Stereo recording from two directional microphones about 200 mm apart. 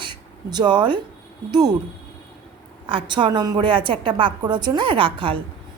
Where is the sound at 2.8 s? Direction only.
25° right (ahead or behind).